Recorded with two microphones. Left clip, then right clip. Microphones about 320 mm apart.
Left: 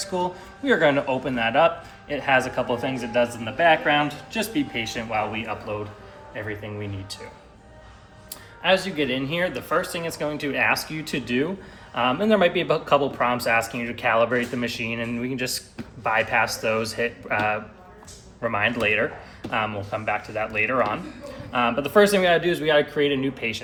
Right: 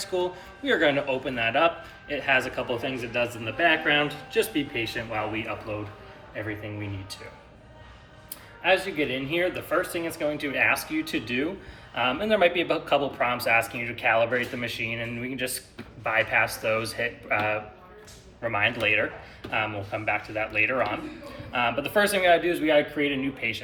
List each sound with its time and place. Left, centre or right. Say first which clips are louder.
0.0 s speech: left 2 dB; left
8.6 s speech: left 2 dB; left